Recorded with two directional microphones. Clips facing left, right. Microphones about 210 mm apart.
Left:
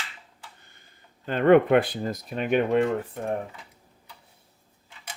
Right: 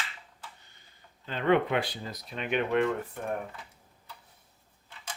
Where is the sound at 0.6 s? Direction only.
55° left (ahead or behind).